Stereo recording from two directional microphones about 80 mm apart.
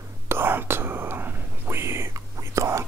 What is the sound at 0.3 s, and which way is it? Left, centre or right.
Whispering, right.